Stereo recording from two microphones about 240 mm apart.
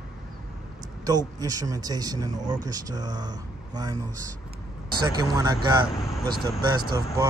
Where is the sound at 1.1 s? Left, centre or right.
Centre.